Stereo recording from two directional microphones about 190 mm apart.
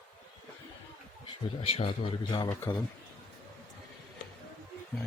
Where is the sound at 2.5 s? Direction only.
10° left (ahead or behind).